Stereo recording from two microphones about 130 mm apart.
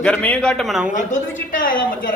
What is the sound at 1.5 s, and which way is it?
Speech, 90° left.